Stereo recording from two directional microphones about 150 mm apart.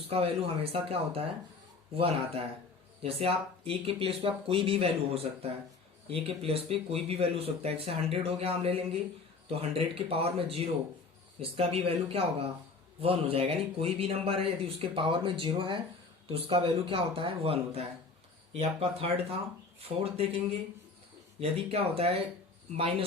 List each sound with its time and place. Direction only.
0.1 s speech: 40° right (ahead or behind)